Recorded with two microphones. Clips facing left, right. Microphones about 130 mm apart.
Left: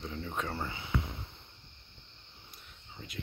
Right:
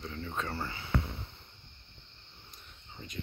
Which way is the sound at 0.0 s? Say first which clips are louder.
Left 1 dB; 10° left (ahead or behind).